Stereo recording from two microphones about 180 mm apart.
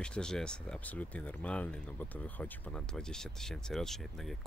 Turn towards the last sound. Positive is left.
turn(degrees=0)  # may be behind; listen again after turning